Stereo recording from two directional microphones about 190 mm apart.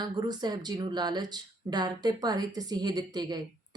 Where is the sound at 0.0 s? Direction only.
20° right (ahead or behind).